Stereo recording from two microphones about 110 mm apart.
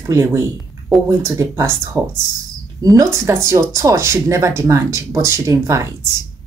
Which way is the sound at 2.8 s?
30° right (ahead or behind).